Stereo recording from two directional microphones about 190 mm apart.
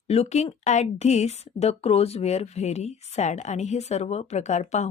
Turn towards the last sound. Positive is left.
turn(degrees=35)  # may be behind; listen again after turning